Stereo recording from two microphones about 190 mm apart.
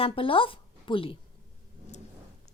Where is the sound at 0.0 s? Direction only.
30° left (ahead or behind).